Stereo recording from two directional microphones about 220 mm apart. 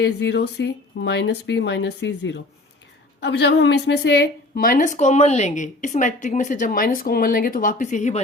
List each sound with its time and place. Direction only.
0.0 s a woman's voice: 50° left (ahead or behind); by 8.2 s 35° left (ahead or behind)